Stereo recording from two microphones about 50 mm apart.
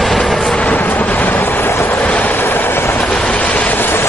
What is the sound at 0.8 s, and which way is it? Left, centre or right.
Vehicle, left.